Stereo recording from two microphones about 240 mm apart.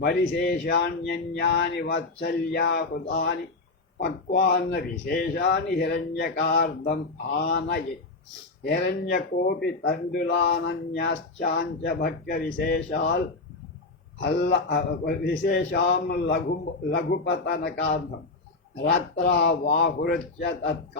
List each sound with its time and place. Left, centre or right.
0.0 s a man's voice: left
14.2 s speech: left